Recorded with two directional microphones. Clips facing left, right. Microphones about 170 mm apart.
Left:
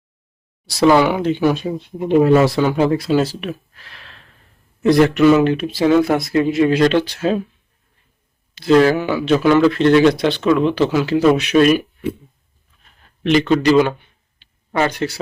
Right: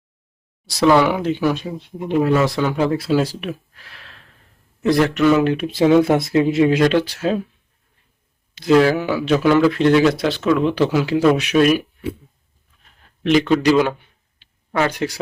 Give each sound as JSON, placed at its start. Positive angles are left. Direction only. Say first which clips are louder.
{"t": 0.7, "sound": "speech", "louder": "left 1 dB", "side_deg": 0}
{"t": 2.3, "sound": "speech", "louder": "left 4 dB", "side_deg": 30}
{"t": 2.6, "sound": "speech", "louder": "left 2 dB", "side_deg": 5}
{"t": 6.0, "sound": "speech", "louder": "even", "side_deg": -25}
{"t": 8.7, "sound": "speech", "louder": "left 1 dB", "side_deg": -5}
{"t": 13.2, "sound": "speech", "louder": "left 1 dB", "side_deg": 0}